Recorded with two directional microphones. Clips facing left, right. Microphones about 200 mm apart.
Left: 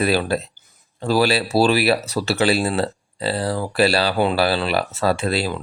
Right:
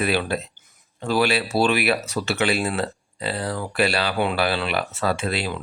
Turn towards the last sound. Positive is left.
turn(degrees=35)  # may be behind; listen again after turning